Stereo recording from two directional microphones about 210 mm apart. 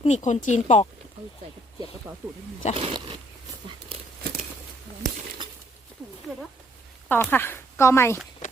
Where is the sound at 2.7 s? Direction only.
25° right (ahead or behind).